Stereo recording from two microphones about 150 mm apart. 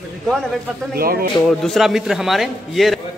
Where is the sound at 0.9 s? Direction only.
80° right.